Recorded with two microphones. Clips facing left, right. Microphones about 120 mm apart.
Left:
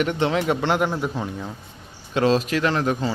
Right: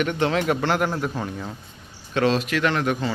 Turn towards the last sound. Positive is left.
turn(degrees=35)  # may be behind; listen again after turning